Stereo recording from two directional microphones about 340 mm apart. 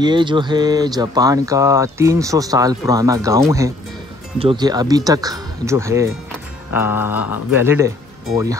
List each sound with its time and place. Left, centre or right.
0.0 s speech: centre
6.7 s mantra: centre
7.5 s speech: centre